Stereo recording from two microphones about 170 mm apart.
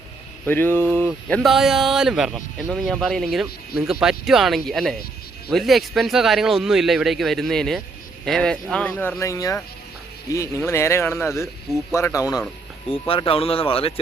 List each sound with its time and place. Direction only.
0.4 s speech: 10° left (ahead or behind)
1.3 s speech: centre (ahead or behind); by 12.4 s 20° left (ahead or behind)
12.9 s speech: 30° left (ahead or behind)